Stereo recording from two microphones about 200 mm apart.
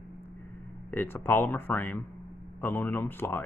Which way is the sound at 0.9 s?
10° left (ahead or behind).